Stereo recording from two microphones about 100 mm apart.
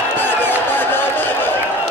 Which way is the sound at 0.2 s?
20° left (ahead or behind).